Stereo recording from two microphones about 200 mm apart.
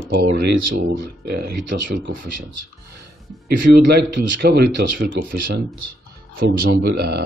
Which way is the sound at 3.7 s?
55° right (ahead or behind).